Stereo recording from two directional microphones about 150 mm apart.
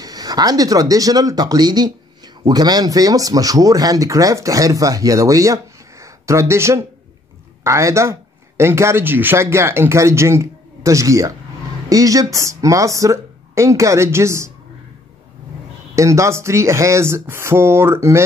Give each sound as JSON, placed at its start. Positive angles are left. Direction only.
{"t": 0.0, "sound": "a woman's voice", "side_deg": -25}
{"t": 15.9, "sound": "speech", "side_deg": -20}